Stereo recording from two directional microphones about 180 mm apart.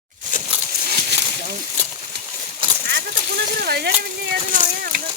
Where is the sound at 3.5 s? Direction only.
60° right (ahead or behind).